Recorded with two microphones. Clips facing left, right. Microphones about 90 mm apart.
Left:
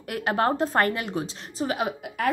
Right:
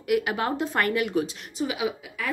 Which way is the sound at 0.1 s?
40° left (ahead or behind).